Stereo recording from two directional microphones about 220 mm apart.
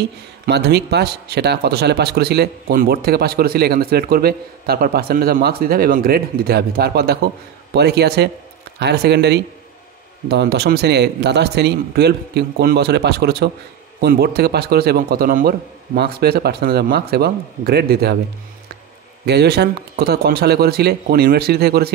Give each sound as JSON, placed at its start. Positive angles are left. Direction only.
{"t": 0.5, "sound": "speech", "side_deg": -50}
{"t": 19.2, "sound": "speech", "side_deg": -50}